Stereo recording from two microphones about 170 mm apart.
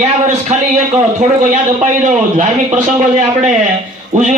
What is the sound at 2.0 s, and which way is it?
Speech, 45° right (ahead or behind).